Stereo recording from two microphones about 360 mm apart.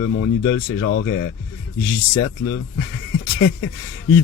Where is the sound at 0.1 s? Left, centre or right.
Left.